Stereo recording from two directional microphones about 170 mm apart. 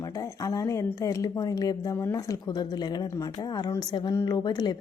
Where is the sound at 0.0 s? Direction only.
20° left (ahead or behind).